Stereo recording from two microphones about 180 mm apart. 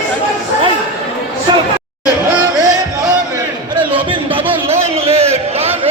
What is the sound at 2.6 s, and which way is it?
Music, 20° right (ahead or behind).